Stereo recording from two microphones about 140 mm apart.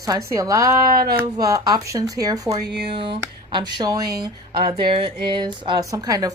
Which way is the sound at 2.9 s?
40° right (ahead or behind).